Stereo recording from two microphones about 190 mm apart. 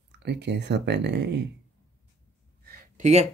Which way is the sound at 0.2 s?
65° right (ahead or behind).